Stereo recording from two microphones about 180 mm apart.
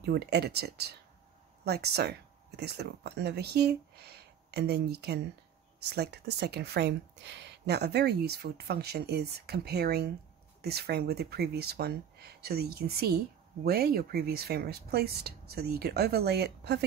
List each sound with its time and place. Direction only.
0.0 s speech: 65° right (ahead or behind)